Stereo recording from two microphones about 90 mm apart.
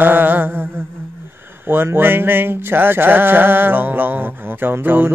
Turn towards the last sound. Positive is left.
turn(degrees=-25)  # may be behind; listen again after turning